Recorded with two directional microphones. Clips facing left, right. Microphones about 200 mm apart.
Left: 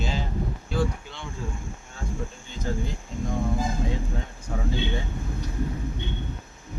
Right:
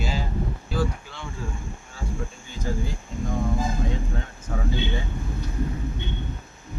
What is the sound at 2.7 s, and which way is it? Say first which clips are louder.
Speech: even; 10° right (ahead or behind).